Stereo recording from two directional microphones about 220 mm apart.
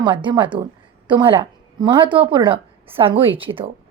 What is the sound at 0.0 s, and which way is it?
A woman's voice, 20° right (ahead or behind).